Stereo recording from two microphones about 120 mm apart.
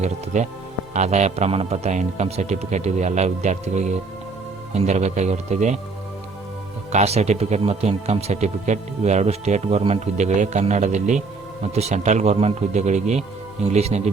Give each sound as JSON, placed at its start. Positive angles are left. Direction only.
{"t": 0.3, "sound": "speech", "side_deg": -75}
{"t": 6.9, "sound": "speech", "side_deg": -65}
{"t": 11.7, "sound": "speech", "side_deg": -65}
{"t": 13.7, "sound": "speech", "side_deg": -60}